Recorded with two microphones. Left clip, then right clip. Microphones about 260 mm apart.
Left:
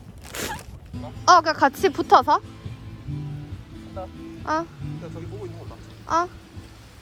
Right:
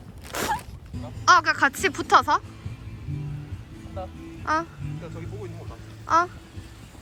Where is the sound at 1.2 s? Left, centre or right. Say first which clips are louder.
Left 2 dB; centre.